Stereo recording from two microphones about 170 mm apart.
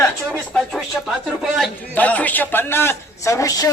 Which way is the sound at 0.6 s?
Centre (ahead or behind).